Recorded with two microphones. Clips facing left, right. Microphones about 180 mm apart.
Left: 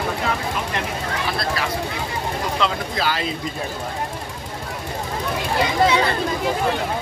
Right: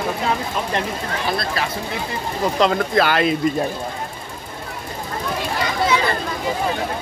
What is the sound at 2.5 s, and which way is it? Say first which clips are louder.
Speech: right 9 dB; 55° right (ahead or behind).